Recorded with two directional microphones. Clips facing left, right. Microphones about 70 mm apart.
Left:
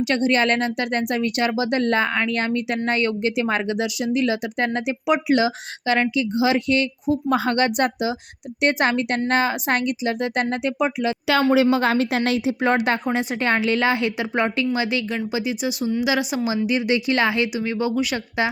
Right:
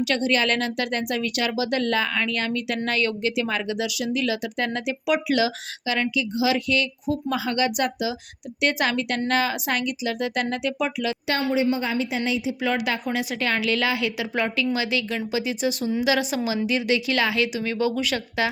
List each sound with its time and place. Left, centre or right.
0.0 s speech: left
7.3 s speech: left
11.5 s a woman's voice: left
12.6 s speech: left; by 18.4 s centre